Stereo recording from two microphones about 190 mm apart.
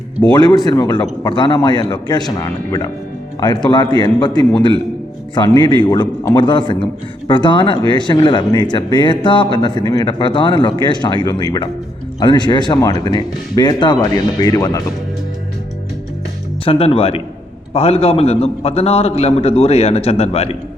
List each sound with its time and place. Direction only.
0.3 s a man's voice: 20° left (ahead or behind)
16.6 s a man's voice: 30° left (ahead or behind)